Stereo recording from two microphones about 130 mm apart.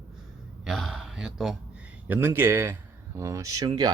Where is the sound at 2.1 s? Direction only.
15° right (ahead or behind); by 3.9 s 30° right (ahead or behind).